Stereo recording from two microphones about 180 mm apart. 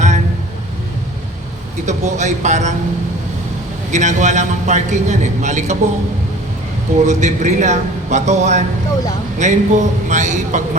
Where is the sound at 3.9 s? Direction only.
40° right (ahead or behind).